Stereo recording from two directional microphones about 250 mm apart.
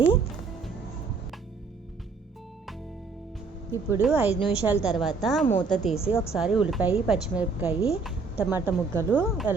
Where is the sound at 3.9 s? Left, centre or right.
Centre.